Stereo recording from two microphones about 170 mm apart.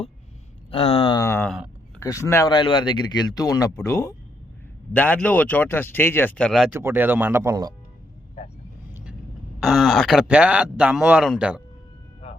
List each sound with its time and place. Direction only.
0.7 s speech: 35° left (ahead or behind)
1.2 s speech: 15° left (ahead or behind)
1.5 s speech: 5° right (ahead or behind)
2.0 s speech: 15° left (ahead or behind)
6.7 s speech: 15° right (ahead or behind)
8.9 s vehicle: 15° right (ahead or behind)
9.6 s speech: centre (ahead or behind)